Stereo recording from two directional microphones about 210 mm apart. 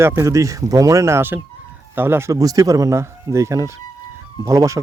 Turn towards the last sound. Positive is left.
turn(degrees=-15)  # may be behind; listen again after turning